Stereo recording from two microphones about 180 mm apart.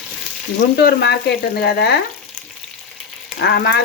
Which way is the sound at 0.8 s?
60° left (ahead or behind).